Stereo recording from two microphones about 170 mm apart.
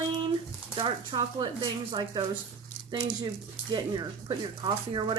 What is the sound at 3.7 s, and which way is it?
Speech, 25° right (ahead or behind).